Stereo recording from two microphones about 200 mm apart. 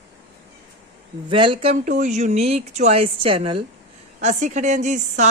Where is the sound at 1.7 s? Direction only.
40° right (ahead or behind).